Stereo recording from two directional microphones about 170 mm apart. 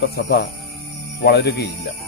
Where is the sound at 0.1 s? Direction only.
75° left (ahead or behind).